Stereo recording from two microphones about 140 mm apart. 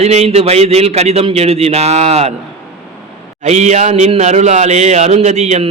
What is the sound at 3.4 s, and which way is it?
A man's voice, 55° right (ahead or behind).